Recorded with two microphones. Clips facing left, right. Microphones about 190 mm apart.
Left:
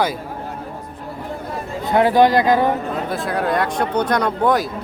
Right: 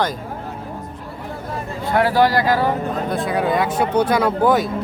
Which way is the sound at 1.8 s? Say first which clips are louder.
Left 2 dB; 20° left (ahead or behind).